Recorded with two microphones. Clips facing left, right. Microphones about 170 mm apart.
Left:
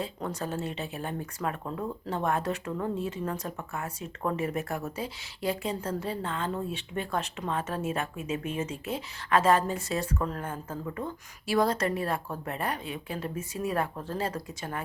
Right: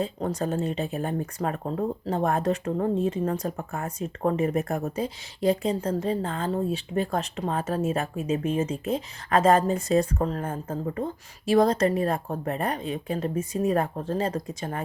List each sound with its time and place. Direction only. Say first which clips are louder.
0.0 s speech: right 6 dB; 40° right (ahead or behind)